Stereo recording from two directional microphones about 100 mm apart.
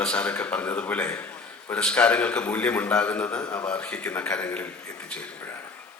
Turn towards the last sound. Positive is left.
turn(degrees=15)  # may be behind; listen again after turning